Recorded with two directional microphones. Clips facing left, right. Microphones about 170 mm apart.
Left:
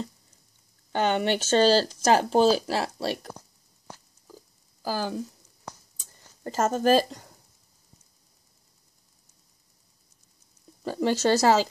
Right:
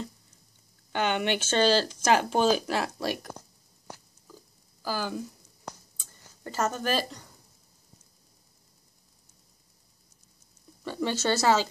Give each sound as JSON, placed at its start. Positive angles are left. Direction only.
{"t": 0.9, "sound": "speech", "side_deg": 40}
{"t": 4.8, "sound": "speech", "side_deg": 40}
{"t": 5.9, "sound": "a sound", "side_deg": 40}
{"t": 10.8, "sound": "speech", "side_deg": 35}